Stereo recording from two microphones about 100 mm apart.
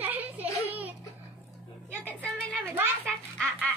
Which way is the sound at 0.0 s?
15° right (ahead or behind).